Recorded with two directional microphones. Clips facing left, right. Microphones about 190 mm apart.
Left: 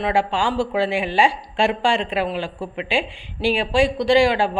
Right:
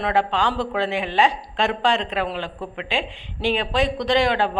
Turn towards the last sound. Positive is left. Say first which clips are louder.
# left 3 dB
turn(degrees=10)  # may be behind; listen again after turning